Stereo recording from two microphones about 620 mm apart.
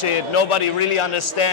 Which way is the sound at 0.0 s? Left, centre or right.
Left.